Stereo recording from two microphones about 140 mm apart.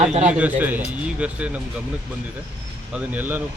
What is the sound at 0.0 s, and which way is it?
Speech, 55° right (ahead or behind).